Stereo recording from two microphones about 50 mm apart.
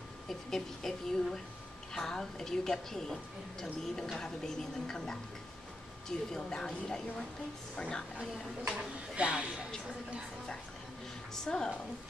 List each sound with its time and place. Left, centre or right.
0.3 s speech: centre
8.6 s speech: centre
11.4 s speech: centre